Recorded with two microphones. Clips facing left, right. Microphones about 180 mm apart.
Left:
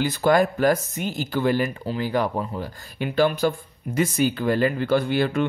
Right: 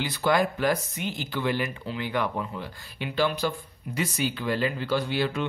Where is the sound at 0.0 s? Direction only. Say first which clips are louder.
Left 5 dB; 45° left (ahead or behind).